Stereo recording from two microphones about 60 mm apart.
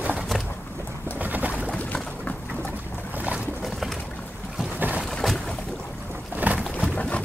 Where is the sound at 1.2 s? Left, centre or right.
Right.